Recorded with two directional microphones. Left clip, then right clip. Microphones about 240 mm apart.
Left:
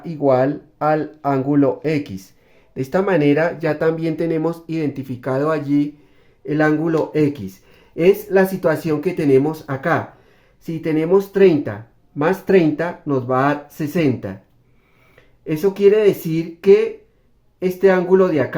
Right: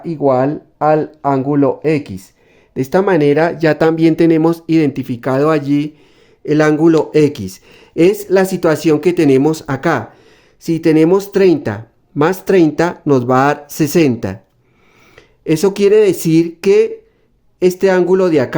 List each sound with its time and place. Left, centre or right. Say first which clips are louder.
0.0 s speech: right 3 dB; right